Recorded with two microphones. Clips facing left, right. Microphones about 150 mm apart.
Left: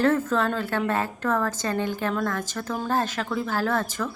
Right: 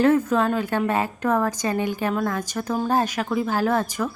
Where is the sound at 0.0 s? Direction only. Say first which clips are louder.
Right 3 dB; 15° right (ahead or behind).